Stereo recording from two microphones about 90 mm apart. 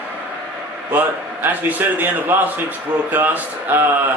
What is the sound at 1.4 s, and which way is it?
A man's voice, 20° right (ahead or behind).